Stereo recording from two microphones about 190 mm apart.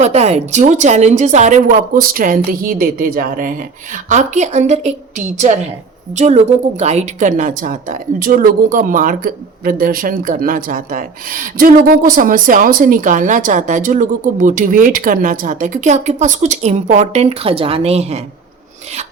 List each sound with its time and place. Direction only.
0.0 s a woman's voice: 35° right (ahead or behind)